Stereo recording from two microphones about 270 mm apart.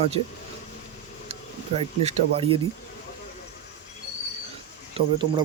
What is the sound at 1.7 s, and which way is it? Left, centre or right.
Speech, right.